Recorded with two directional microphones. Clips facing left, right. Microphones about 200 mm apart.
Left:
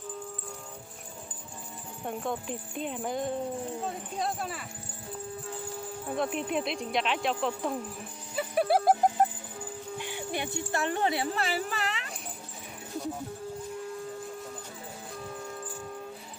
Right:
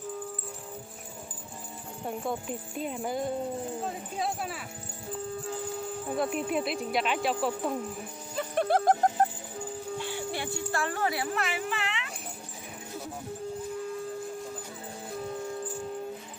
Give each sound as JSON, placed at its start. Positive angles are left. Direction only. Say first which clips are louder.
{"t": 2.0, "sound": "speech", "louder": "even", "side_deg": 0}
{"t": 6.1, "sound": "speech", "louder": "right 1 dB", "side_deg": 0}
{"t": 8.4, "sound": "speech", "louder": "left 1 dB", "side_deg": 5}
{"t": 10.0, "sound": "speech", "louder": "left 2 dB", "side_deg": 15}